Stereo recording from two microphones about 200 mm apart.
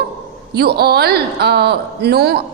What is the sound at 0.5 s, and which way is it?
A woman's voice, 50° right (ahead or behind).